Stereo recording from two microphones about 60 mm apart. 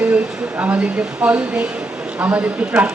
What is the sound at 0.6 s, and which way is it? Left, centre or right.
A woman's voice, right.